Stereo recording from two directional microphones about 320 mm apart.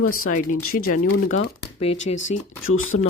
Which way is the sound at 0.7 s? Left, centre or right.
Left.